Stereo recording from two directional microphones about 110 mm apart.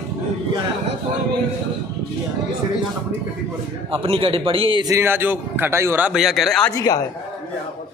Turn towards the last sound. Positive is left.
turn(degrees=0)  # may be behind; listen again after turning